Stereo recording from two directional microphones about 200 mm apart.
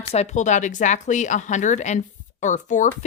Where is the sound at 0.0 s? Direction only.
30° left (ahead or behind).